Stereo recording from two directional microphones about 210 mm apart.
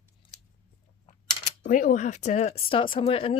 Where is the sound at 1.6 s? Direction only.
40° left (ahead or behind).